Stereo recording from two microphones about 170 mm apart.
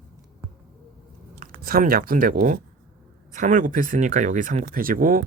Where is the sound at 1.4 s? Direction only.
55° right (ahead or behind).